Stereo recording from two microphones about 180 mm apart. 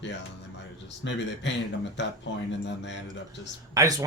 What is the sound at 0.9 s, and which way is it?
A man's voice, 85° left.